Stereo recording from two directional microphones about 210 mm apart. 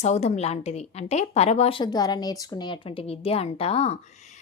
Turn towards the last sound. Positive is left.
turn(degrees=30)  # may be behind; listen again after turning